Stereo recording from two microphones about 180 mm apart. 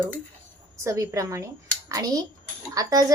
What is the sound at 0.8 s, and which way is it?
A woman's voice, 15° right (ahead or behind).